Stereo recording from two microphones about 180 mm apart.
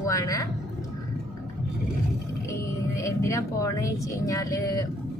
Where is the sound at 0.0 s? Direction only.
20° left (ahead or behind).